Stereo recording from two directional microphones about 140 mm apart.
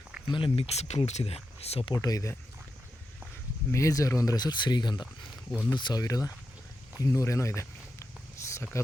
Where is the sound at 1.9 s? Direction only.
25° left (ahead or behind).